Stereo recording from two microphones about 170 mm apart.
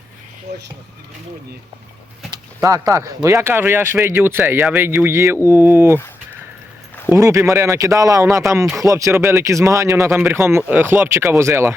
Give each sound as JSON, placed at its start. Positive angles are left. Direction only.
{"t": 2.3, "sound": "a sound", "side_deg": -20}
{"t": 3.2, "sound": "speech", "side_deg": -15}
{"t": 7.1, "sound": "speech", "side_deg": -15}
{"t": 8.6, "sound": "speech", "side_deg": 0}
{"t": 8.9, "sound": "speech", "side_deg": -20}